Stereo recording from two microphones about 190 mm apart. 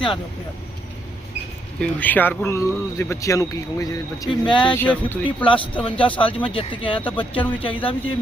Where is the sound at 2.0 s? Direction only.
10° left (ahead or behind); by 4.7 s 25° left (ahead or behind).